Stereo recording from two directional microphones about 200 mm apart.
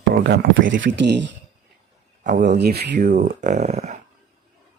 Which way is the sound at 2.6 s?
55° right (ahead or behind).